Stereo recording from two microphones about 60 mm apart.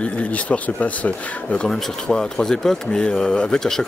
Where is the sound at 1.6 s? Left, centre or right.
Centre.